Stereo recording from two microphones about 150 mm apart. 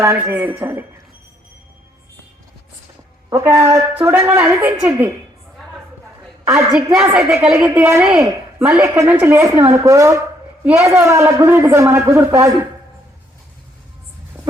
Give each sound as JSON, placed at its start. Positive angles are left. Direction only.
{"t": 0.0, "sound": "a woman's voice", "side_deg": -15}
{"t": 3.2, "sound": "a woman's voice", "side_deg": -20}
{"t": 6.4, "sound": "a sound", "side_deg": -15}
{"t": 6.9, "sound": "a woman's voice", "side_deg": -5}
{"t": 7.7, "sound": "a woman's voice", "side_deg": -15}